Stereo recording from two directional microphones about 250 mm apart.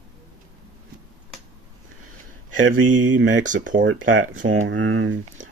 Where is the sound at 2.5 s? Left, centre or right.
Right.